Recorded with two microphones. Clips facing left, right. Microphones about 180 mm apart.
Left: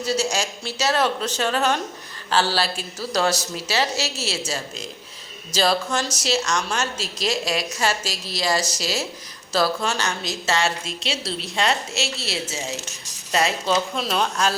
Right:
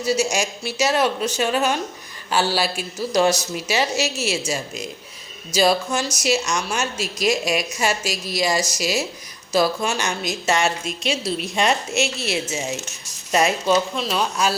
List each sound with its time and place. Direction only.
0.0 s a woman's voice: 10° right (ahead or behind)
13.9 s speech: centre (ahead or behind)